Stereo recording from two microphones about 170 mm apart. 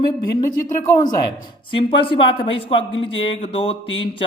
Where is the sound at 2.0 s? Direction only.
30° left (ahead or behind).